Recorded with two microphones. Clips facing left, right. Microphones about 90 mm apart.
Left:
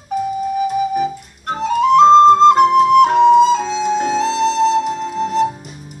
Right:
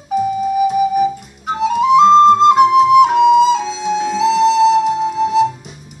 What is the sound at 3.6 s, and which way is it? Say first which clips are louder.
Flute: left 1 dB; 40° left (ahead or behind).